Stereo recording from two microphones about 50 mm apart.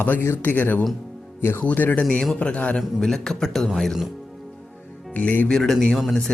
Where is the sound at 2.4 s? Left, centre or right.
Left.